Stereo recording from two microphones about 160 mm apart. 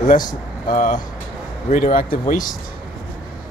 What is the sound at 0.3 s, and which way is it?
Speech, 55° left (ahead or behind).